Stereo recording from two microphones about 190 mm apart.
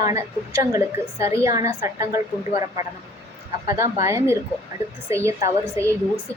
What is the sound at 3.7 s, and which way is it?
A woman's voice, 15° right (ahead or behind).